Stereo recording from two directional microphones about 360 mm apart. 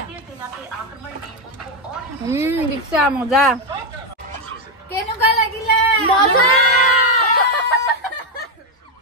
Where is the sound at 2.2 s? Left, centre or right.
Centre.